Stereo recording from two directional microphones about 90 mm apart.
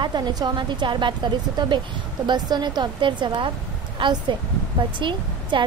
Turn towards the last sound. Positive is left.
turn(degrees=-65)  # may be behind; listen again after turning